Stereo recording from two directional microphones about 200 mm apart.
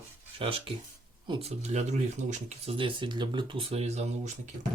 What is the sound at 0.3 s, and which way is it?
Speech, 25° right (ahead or behind).